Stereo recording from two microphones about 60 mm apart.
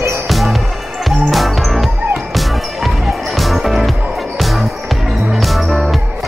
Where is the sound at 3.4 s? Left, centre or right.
Centre.